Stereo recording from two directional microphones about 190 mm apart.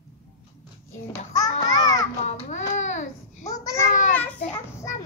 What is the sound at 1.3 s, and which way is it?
Children playing, 20° left (ahead or behind).